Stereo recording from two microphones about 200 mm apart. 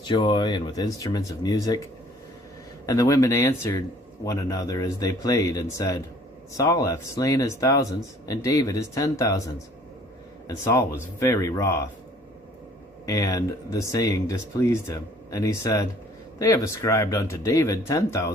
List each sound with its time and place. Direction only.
0.0 s speech: 25° left (ahead or behind)
2.8 s speech: 15° left (ahead or behind)
10.4 s speech: 15° left (ahead or behind)
13.1 s speech: 15° left (ahead or behind)